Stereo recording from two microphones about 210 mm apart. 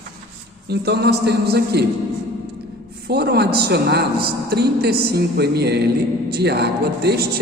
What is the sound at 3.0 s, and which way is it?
A man's voice, 50° right (ahead or behind).